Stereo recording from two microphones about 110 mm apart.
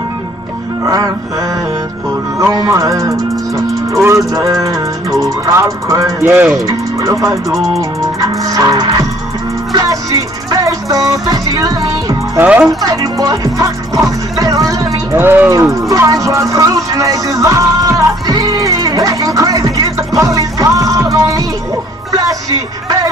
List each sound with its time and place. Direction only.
0.8 s music: 35° right (ahead or behind)
2.3 s music: 30° right (ahead or behind)
6.6 s speech: 30° right (ahead or behind)
7.5 s music: centre (ahead or behind)
8.0 s music: 30° right (ahead or behind)
12.4 s speech: 20° right (ahead or behind)
12.6 s music: 30° right (ahead or behind)
15.1 s music: 20° right (ahead or behind)